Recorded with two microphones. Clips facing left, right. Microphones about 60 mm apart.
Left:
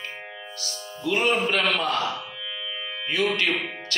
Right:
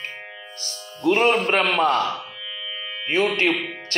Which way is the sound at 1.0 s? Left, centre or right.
Right.